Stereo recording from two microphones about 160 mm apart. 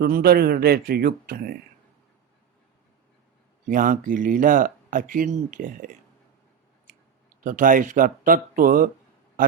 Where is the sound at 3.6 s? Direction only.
60° right (ahead or behind).